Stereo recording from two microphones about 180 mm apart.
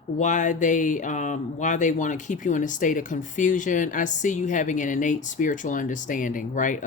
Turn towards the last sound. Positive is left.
turn(degrees=45)  # may be behind; listen again after turning